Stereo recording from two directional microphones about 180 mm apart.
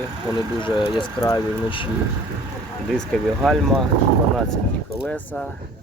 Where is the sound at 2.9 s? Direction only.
Centre (ahead or behind).